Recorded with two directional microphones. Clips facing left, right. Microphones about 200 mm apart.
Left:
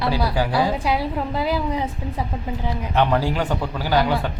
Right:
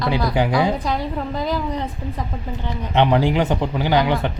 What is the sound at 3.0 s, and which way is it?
A man's voice, 20° right (ahead or behind).